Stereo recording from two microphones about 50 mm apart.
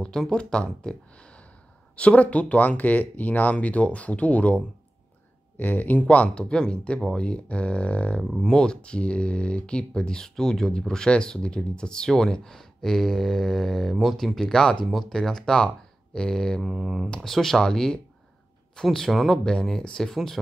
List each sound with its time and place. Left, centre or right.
0.0 s speech: centre
1.1 s a sound: left
2.0 s speech: left
8.2 s speech: centre
16.6 s speech: centre
17.1 s speech: centre